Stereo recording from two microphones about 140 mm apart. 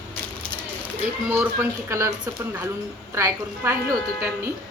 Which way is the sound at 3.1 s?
20° right (ahead or behind).